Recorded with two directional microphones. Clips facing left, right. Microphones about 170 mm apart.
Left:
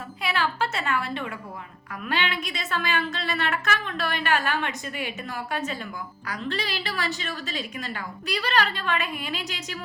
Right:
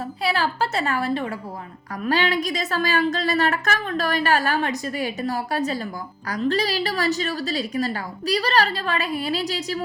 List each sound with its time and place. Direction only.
0.2 s speech: 35° right (ahead or behind)